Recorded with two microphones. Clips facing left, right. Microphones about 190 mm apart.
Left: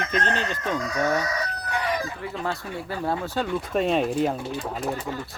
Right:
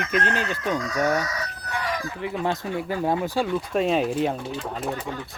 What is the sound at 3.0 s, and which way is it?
Speech, 15° right (ahead or behind).